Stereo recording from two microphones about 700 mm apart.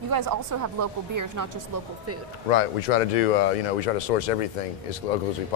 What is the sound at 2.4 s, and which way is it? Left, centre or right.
Speech, left.